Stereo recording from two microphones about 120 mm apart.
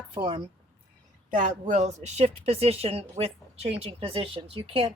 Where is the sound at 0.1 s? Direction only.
45° right (ahead or behind).